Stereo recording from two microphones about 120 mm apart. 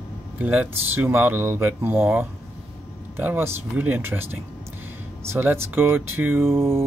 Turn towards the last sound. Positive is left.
turn(degrees=-20)  # may be behind; listen again after turning